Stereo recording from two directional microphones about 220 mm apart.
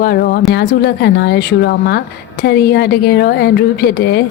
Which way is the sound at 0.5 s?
50° left (ahead or behind).